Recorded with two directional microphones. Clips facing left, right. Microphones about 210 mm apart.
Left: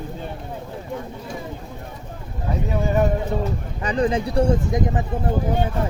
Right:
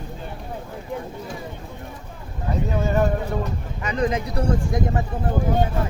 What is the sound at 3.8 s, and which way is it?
Speech, 30° left (ahead or behind).